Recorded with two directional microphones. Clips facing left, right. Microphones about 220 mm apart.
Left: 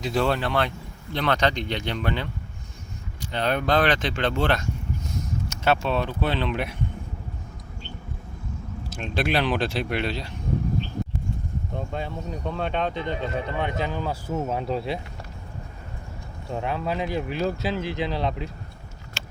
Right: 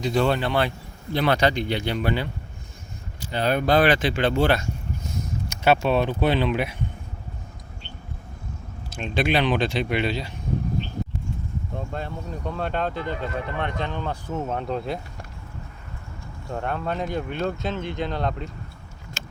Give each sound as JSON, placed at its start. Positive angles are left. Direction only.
{"t": 0.0, "sound": "speech", "side_deg": 0}
{"t": 8.9, "sound": "speech", "side_deg": 0}
{"t": 11.9, "sound": "speech", "side_deg": 0}
{"t": 13.0, "sound": "speech", "side_deg": 25}
{"t": 13.6, "sound": "speech", "side_deg": 5}
{"t": 16.5, "sound": "speech", "side_deg": 0}
{"t": 19.2, "sound": "vehicle", "side_deg": -45}